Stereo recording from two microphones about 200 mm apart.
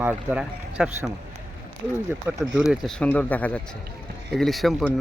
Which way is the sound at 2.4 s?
Centre (ahead or behind).